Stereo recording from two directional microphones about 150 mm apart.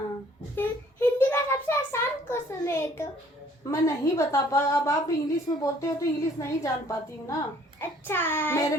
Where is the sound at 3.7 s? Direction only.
20° left (ahead or behind).